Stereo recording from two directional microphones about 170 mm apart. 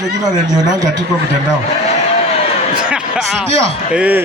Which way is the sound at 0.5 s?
20° right (ahead or behind).